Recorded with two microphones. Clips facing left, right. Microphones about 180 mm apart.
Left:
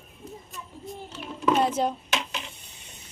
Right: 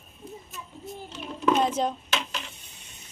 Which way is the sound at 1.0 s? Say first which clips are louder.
Even; 10° left (ahead or behind).